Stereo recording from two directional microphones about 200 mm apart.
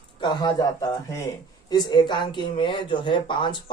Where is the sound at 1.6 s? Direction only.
20° left (ahead or behind).